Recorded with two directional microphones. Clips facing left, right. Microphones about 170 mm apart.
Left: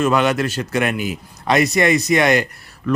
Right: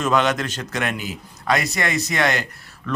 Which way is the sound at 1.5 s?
20° left (ahead or behind).